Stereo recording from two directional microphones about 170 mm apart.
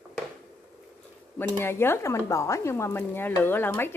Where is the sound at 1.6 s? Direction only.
15° left (ahead or behind).